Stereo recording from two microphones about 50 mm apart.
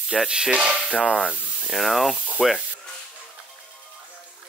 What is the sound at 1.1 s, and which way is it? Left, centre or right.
Speech, left.